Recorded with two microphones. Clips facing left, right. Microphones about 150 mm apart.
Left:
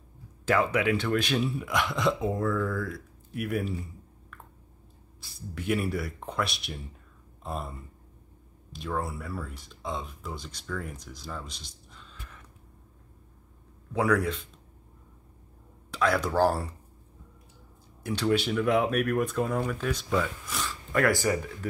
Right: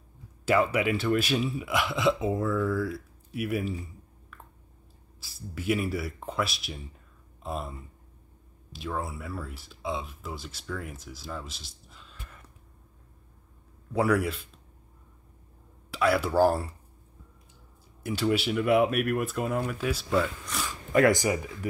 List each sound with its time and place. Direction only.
0.5 s speech: 5° right (ahead or behind)
5.2 s speech: 5° right (ahead or behind)
8.7 s speech: centre (ahead or behind)
13.9 s speech: 5° right (ahead or behind)
15.9 s speech: 5° right (ahead or behind)
18.0 s speech: 5° right (ahead or behind)
20.6 s speech: 20° right (ahead or behind)